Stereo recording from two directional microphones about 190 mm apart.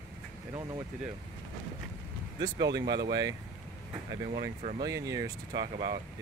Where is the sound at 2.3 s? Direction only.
20° right (ahead or behind).